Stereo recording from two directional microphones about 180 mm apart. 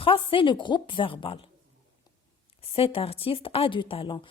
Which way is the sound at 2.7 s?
30° left (ahead or behind).